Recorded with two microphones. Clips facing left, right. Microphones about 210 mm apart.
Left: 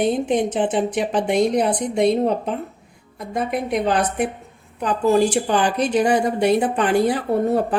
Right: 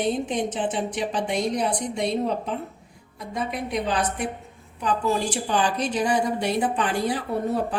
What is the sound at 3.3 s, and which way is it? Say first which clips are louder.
A woman's voice: left 6 dB; 55° left (ahead or behind).